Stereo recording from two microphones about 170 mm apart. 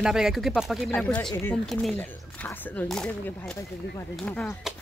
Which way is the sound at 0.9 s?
10° left (ahead or behind).